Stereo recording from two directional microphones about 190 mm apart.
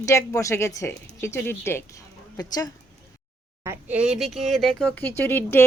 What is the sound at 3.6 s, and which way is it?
Speech, 5° right (ahead or behind).